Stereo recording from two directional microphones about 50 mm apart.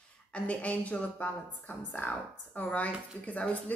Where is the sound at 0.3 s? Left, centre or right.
Left.